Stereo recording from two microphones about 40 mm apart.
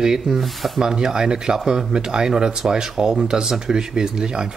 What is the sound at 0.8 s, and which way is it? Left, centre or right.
Speech, centre.